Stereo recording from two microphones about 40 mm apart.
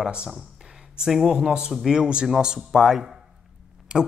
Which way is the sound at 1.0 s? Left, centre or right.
Centre.